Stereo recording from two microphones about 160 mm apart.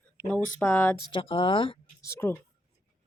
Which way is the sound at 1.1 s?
35° left (ahead or behind).